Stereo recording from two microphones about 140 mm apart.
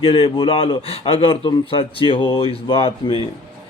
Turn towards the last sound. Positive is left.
turn(degrees=40)  # may be behind; listen again after turning